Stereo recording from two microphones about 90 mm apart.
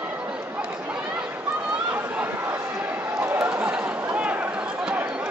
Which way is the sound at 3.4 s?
15° right (ahead or behind).